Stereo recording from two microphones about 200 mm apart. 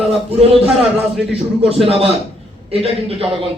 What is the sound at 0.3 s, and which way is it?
A man's voice, 30° right (ahead or behind).